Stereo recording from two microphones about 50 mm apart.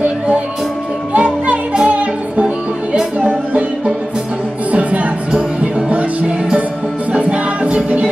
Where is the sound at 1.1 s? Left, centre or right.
Right.